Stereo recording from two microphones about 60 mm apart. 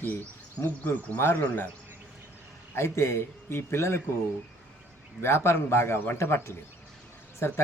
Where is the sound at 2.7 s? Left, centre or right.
Left.